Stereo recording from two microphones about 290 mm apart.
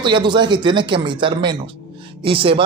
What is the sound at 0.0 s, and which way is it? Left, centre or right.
A man's voice, centre.